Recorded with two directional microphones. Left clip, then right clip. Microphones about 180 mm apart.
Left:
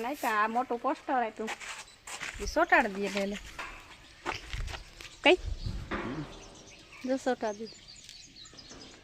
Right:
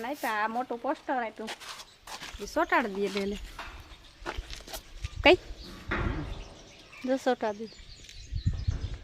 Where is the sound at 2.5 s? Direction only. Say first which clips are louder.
Left 2 dB; centre (ahead or behind).